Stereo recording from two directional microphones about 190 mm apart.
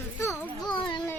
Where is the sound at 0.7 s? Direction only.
25° left (ahead or behind).